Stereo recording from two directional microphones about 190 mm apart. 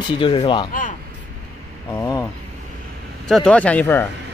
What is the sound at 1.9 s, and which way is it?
Vehicle, 20° left (ahead or behind).